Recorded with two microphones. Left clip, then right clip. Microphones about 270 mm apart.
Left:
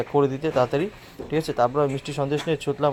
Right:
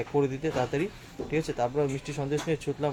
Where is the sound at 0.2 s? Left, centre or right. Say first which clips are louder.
Left 7 dB; centre.